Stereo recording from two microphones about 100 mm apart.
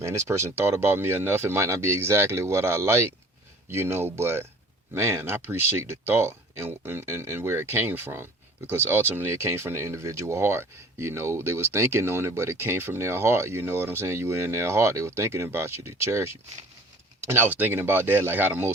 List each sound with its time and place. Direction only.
0.0 s speech: 30° right (ahead or behind)